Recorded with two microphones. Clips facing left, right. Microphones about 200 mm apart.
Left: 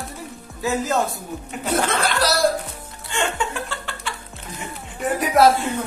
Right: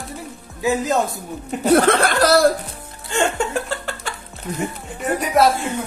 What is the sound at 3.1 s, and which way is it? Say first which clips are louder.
Laughter: right 5 dB; 40° right (ahead or behind).